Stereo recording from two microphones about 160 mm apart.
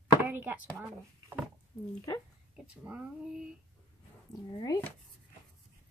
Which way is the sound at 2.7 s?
5° right (ahead or behind).